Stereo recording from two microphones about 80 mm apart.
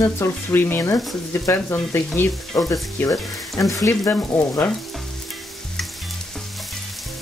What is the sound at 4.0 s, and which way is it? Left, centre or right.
Frying, centre.